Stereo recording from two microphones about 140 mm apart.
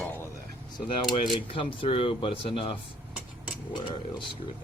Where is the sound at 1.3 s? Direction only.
40° left (ahead or behind).